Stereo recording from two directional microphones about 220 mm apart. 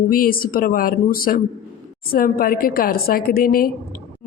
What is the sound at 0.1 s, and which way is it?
Speech, 40° left (ahead or behind).